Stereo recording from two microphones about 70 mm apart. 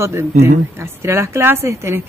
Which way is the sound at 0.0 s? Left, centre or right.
Right.